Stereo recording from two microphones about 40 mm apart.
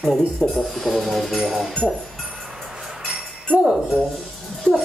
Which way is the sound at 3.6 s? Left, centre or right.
Centre.